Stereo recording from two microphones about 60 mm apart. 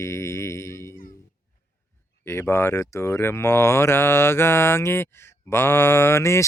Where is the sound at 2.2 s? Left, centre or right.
Left.